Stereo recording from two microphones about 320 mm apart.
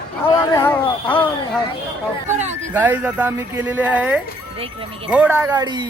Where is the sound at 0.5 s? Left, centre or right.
Centre.